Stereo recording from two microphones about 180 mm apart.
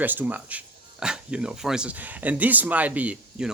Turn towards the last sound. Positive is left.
turn(degrees=-10)  # may be behind; listen again after turning